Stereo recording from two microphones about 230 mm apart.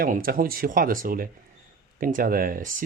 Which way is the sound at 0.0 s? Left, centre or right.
Right.